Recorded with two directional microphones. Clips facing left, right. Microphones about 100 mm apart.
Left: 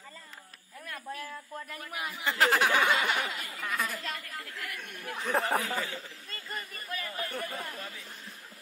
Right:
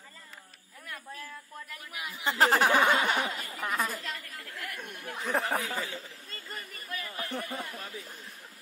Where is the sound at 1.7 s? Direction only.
40° left (ahead or behind).